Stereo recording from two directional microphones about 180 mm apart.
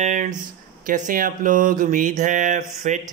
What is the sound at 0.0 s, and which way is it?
A man's voice, 45° right (ahead or behind).